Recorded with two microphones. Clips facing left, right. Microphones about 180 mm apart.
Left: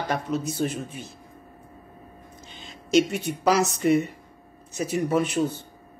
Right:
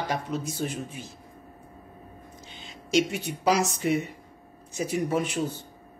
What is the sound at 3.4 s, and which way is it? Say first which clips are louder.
Speech: left 3 dB; 15° right (ahead or behind).